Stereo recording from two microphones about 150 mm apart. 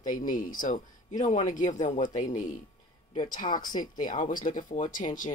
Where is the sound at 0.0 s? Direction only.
60° left (ahead or behind).